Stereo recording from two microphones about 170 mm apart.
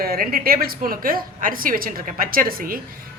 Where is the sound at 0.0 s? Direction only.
60° right (ahead or behind).